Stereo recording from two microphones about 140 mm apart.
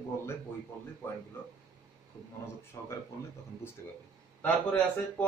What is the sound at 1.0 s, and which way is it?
Speech, 15° left (ahead or behind).